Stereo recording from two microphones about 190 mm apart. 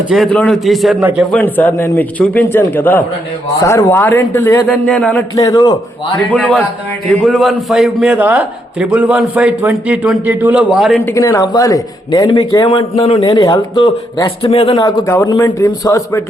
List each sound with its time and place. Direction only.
0.1 s a man's voice: centre (ahead or behind)
1.2 s a man's voice: 5° left (ahead or behind)
5.4 s speech: 20° left (ahead or behind)
6.3 s a man's voice: 5° left (ahead or behind)
11.0 s speech: 15° left (ahead or behind)
13.2 s speech: 20° left (ahead or behind)
14.8 s a man's voice: 20° left (ahead or behind)